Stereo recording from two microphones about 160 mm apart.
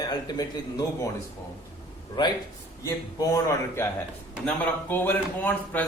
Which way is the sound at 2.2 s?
30° left (ahead or behind).